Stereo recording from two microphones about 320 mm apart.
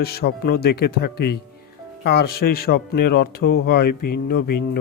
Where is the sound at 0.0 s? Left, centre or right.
Left.